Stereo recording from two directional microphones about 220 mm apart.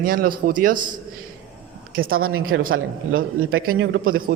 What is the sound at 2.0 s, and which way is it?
Speech, 40° right (ahead or behind).